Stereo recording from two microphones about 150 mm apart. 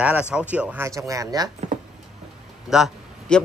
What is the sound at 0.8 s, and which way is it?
Speech, 20° right (ahead or behind).